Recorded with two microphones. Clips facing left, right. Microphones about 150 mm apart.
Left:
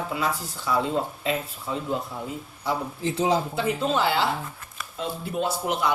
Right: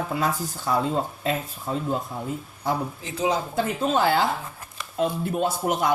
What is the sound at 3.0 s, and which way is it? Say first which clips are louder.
Speech: left 2 dB; 30° left (ahead or behind).